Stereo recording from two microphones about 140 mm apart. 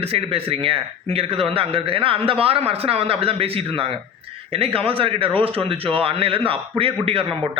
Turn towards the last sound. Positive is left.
turn(degrees=-40)  # may be behind; listen again after turning